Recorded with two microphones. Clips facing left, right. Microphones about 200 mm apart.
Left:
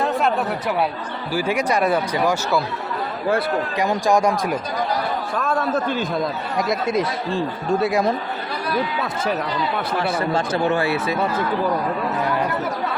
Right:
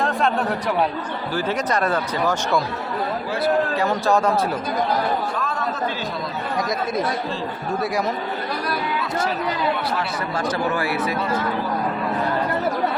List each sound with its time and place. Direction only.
1.3 s speech: 10° left (ahead or behind)
3.8 s speech: 15° left (ahead or behind)
5.4 s a sound: 50° left (ahead or behind)
10.2 s speech: 25° left (ahead or behind)